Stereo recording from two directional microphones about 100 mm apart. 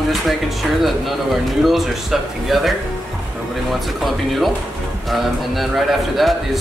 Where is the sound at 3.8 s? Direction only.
Centre (ahead or behind).